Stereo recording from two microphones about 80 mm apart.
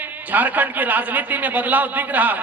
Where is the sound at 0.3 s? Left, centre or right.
Right.